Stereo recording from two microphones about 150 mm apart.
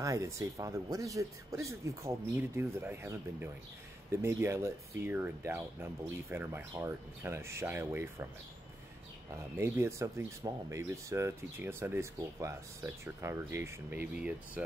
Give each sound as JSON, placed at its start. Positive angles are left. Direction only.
{"t": 0.0, "sound": "speech", "side_deg": -20}
{"t": 9.3, "sound": "speech", "side_deg": -15}